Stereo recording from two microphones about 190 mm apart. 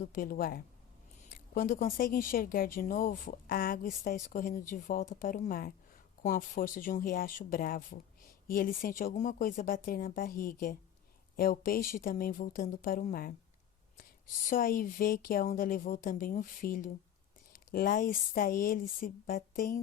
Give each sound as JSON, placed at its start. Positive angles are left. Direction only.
{"t": 0.0, "sound": "speech", "side_deg": 50}
{"t": 14.4, "sound": "speech", "side_deg": 45}